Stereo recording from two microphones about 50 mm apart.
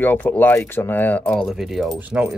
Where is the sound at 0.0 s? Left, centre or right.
Left.